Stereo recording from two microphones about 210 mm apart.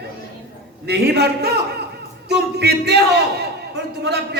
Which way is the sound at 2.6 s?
50° right (ahead or behind).